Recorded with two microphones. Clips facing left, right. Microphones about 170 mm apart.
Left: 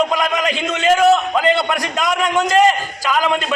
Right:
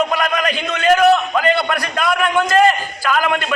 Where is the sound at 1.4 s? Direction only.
20° left (ahead or behind).